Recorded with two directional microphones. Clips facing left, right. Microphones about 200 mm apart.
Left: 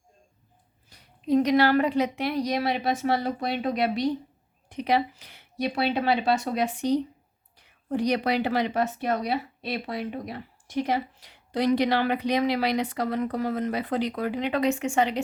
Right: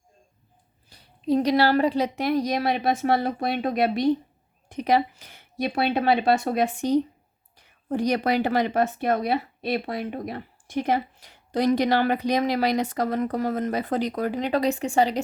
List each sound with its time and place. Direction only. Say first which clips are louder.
0.9 s a woman's voice: right 1 dB; 30° right (ahead or behind)